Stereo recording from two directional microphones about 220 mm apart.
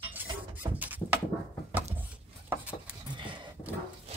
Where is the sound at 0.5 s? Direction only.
5° right (ahead or behind).